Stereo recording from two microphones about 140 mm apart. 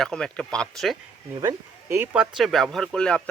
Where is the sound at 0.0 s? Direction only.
5° left (ahead or behind).